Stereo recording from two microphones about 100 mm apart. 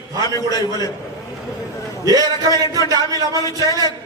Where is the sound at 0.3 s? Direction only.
35° left (ahead or behind).